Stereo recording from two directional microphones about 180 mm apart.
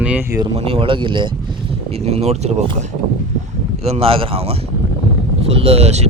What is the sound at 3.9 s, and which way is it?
Speech, 30° right (ahead or behind).